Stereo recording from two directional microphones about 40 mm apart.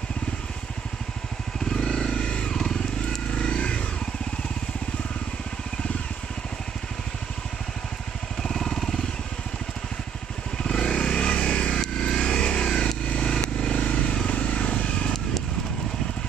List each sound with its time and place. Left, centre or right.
1.7 s vehicle: centre
8.4 s motorcycle: centre
10.6 s motorcycle: centre
11.1 s vehicle: left